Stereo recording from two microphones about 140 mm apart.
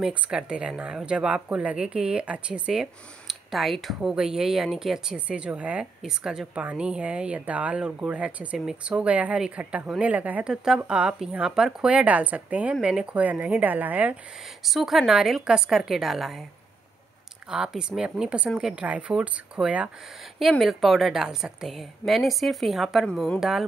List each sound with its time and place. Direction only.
0.0 s speech: 5° right (ahead or behind)
14.6 s a woman's voice: centre (ahead or behind)
17.5 s a woman's voice: 5° right (ahead or behind)